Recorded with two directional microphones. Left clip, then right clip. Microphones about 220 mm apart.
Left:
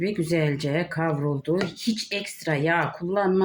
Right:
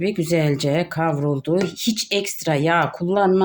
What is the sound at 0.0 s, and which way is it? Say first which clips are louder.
Speech: right 4 dB; 45° right (ahead or behind).